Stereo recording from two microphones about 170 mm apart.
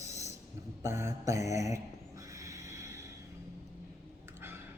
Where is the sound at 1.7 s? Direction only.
20° right (ahead or behind).